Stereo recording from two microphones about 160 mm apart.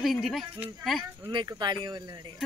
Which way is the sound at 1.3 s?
25° right (ahead or behind).